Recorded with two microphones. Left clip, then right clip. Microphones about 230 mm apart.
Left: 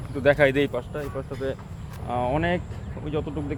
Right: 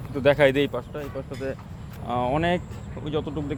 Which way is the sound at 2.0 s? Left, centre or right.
Right.